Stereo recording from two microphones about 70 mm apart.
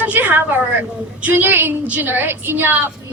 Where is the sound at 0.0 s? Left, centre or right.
Right.